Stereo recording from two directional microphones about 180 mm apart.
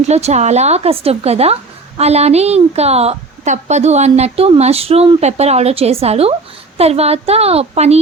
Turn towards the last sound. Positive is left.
turn(degrees=-35)  # may be behind; listen again after turning